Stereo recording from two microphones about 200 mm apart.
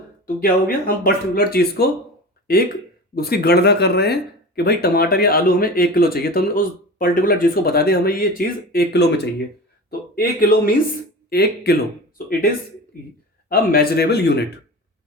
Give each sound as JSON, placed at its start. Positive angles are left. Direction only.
{"t": 0.4, "sound": "speech", "side_deg": 45}
{"t": 13.5, "sound": "speech", "side_deg": 50}